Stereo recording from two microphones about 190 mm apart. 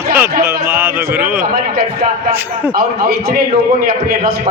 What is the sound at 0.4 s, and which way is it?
Speech, 10° right (ahead or behind).